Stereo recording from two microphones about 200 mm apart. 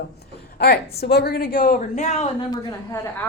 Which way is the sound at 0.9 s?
50° left (ahead or behind).